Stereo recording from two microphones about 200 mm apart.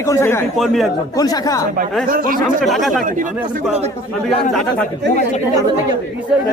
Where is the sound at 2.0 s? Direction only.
45° right (ahead or behind).